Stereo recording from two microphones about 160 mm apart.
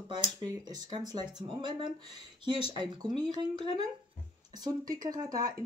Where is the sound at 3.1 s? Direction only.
25° right (ahead or behind).